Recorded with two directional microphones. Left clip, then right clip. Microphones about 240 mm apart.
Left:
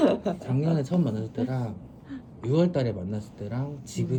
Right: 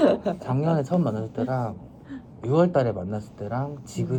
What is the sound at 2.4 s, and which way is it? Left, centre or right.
A man's voice, centre.